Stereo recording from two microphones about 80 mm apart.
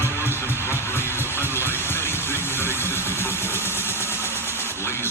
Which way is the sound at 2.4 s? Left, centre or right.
Left.